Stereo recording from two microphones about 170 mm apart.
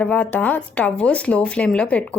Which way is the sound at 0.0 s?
10° left (ahead or behind).